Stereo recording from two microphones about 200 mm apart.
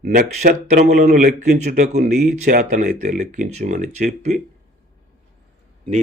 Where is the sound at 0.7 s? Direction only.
40° right (ahead or behind).